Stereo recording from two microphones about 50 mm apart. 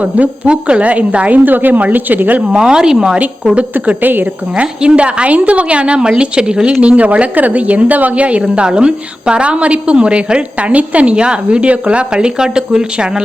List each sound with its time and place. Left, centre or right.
0.0 s a woman's voice: right
2.5 s a woman's voice: centre
3.8 s a woman's voice: right
4.5 s a woman's voice: right
6.8 s a woman's voice: right